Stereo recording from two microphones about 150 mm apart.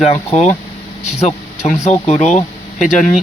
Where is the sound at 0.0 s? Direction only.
45° left (ahead or behind).